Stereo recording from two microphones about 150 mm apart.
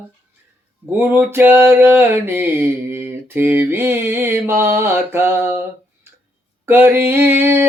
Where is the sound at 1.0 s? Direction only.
10° right (ahead or behind).